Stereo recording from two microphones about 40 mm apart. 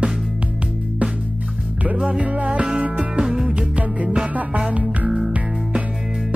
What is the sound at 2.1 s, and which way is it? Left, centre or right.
Music, right.